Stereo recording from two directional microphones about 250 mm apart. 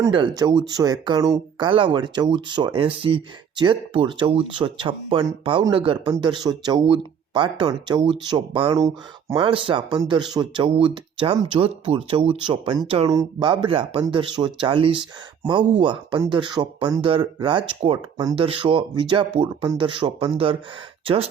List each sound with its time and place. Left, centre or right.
0.0 s speech: centre